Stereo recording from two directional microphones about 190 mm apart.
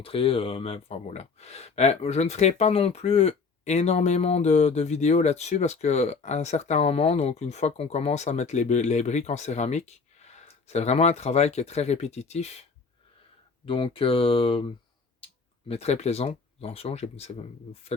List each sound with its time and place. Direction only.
0.0 s speech: 30° left (ahead or behind)
13.7 s speech: 25° left (ahead or behind)
15.7 s speech: 35° left (ahead or behind)